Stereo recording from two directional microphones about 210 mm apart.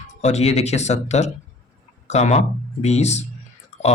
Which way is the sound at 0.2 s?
30° left (ahead or behind).